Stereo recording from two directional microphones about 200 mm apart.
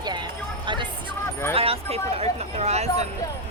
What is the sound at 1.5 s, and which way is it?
Speech, 30° right (ahead or behind).